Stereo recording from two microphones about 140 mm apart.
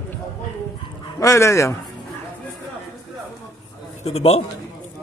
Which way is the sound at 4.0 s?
45° left (ahead or behind).